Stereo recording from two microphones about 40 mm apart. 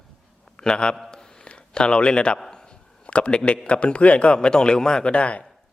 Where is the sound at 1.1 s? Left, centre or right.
Centre.